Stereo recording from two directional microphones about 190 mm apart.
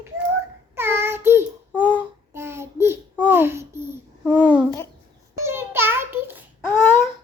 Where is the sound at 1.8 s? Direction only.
10° left (ahead or behind).